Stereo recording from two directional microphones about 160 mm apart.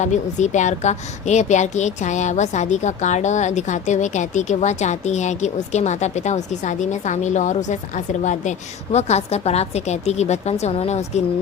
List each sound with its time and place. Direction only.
0.0 s a woman's voice: 50° left (ahead or behind)